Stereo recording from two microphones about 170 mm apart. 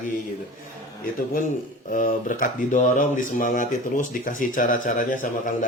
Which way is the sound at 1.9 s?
50° left (ahead or behind).